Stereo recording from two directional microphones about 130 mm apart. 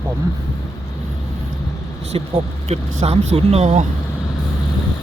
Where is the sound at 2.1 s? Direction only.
50° right (ahead or behind).